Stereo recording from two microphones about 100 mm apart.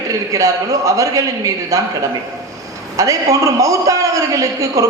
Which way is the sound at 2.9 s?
35° right (ahead or behind).